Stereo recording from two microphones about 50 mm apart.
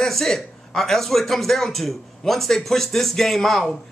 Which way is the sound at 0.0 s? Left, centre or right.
Centre.